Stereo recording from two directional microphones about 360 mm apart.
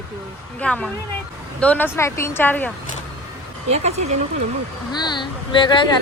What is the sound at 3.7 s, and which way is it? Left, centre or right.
Speech, centre.